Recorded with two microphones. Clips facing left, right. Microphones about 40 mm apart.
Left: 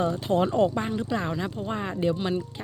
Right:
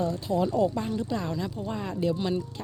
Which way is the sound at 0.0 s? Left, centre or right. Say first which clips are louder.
Left 3 dB; left.